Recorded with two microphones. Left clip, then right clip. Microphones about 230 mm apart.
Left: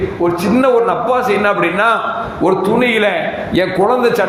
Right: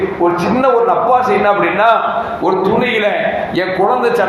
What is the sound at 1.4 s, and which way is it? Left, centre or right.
A man's voice, left.